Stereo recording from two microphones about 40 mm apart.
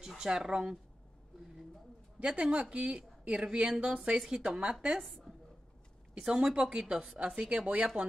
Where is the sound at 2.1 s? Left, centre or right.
Right.